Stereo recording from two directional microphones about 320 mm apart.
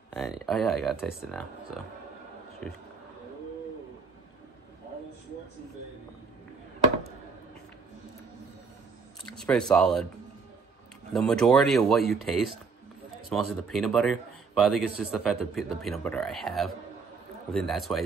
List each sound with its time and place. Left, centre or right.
0.1 s a man's voice: centre
9.2 s a man's voice: centre
11.1 s a man's voice: centre